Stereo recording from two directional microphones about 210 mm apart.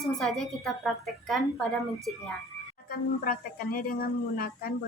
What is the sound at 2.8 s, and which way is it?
Speech, 45° left (ahead or behind).